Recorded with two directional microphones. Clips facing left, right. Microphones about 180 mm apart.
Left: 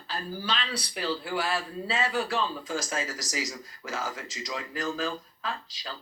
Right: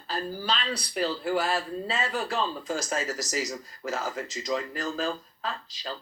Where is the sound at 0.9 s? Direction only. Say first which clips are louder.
Right 4 dB; 45° right (ahead or behind).